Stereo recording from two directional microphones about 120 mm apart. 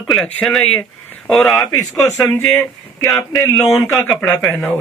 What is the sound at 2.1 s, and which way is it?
Speech, 15° left (ahead or behind).